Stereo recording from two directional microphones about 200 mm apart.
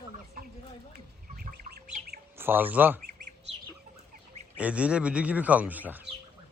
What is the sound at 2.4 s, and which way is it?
Speech, 10° right (ahead or behind).